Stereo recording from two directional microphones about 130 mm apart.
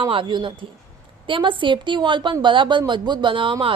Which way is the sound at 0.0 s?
40° right (ahead or behind).